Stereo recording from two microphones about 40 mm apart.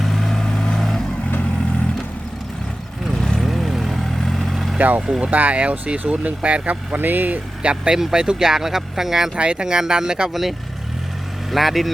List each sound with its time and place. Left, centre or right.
0.0 s vehicle: centre
3.2 s vehicle: centre
3.4 s vehicle: centre
4.1 s vehicle: centre
4.5 s vehicle: centre
4.8 s speech: right
6.9 s speech: right
7.6 s speech: right
7.9 s speech: centre
8.2 s speech: right
8.4 s speech: centre
9.3 s speech: right
11.5 s speech: centre